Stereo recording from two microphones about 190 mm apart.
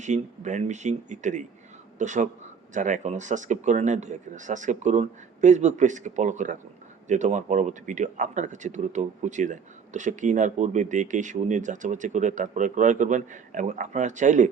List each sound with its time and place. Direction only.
0.0 s speech: 40° right (ahead or behind)